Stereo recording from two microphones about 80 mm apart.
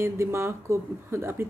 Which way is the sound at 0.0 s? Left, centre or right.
Right.